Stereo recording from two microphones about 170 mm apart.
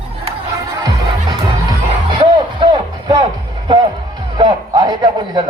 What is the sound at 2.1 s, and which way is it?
Music, 25° right (ahead or behind).